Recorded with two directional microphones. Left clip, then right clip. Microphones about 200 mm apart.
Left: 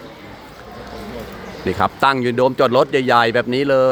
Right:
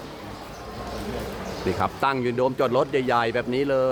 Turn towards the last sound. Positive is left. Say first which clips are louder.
# left 7 dB
turn(degrees=30)  # may be behind; listen again after turning